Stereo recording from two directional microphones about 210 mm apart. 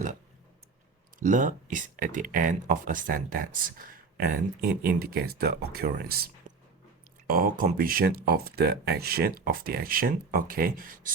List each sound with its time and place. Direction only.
1.2 s speech: 40° right (ahead or behind)